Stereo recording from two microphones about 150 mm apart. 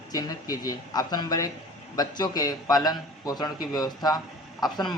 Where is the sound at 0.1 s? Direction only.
25° left (ahead or behind).